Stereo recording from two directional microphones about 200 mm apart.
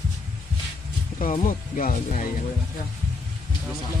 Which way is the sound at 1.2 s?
40° left (ahead or behind).